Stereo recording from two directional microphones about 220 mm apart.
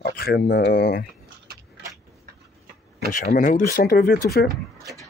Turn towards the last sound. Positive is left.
turn(degrees=45)  # may be behind; listen again after turning